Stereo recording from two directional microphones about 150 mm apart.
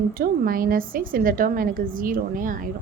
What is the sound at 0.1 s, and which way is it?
A woman's voice, 70° right (ahead or behind).